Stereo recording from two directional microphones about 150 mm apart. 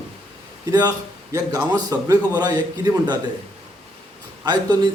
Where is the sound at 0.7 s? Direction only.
25° right (ahead or behind).